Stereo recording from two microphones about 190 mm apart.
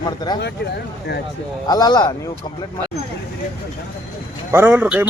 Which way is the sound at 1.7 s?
20° left (ahead or behind).